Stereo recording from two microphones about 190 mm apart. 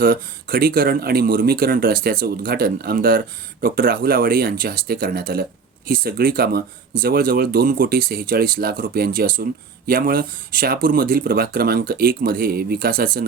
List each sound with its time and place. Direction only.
0.0 s speech: 50° right (ahead or behind)